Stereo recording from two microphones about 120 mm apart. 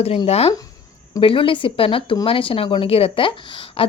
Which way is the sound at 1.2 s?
50° left (ahead or behind).